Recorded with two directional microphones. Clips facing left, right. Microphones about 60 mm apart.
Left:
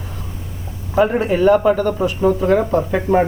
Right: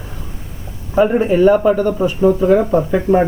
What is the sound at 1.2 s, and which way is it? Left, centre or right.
Speech, centre.